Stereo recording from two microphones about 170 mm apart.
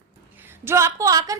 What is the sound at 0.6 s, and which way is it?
Speech, 15° right (ahead or behind).